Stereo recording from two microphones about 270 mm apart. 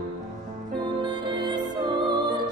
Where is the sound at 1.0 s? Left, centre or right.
Centre.